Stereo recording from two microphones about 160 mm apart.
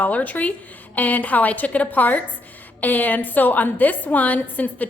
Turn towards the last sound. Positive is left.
turn(degrees=10)  # may be behind; listen again after turning